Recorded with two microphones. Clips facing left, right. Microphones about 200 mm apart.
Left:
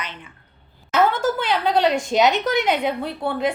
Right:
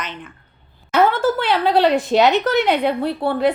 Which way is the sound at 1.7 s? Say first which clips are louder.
Right 4 dB; 5° right (ahead or behind).